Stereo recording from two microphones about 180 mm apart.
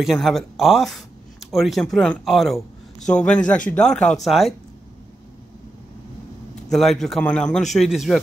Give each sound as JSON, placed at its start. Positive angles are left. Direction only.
{"t": 0.0, "sound": "speech", "side_deg": 0}
{"t": 3.0, "sound": "a man's voice", "side_deg": 40}
{"t": 3.7, "sound": "speech", "side_deg": 5}
{"t": 6.7, "sound": "speech", "side_deg": 0}